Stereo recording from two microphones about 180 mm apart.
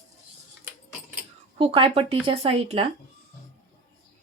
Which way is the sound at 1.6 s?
30° right (ahead or behind).